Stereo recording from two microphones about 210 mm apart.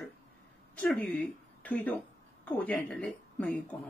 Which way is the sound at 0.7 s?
5° left (ahead or behind).